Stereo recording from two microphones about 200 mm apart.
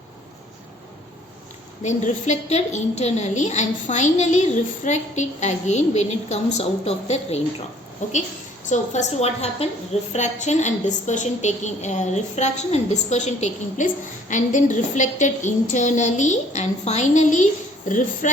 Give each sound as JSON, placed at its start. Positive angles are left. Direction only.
{"t": 1.8, "sound": "a woman's voice", "side_deg": 35}
{"t": 8.7, "sound": "a woman's voice", "side_deg": 35}